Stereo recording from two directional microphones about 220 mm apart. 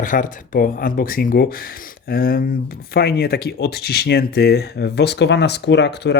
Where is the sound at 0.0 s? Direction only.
35° left (ahead or behind).